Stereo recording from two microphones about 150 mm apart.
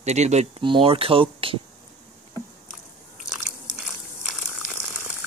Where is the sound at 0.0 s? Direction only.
50° right (ahead or behind).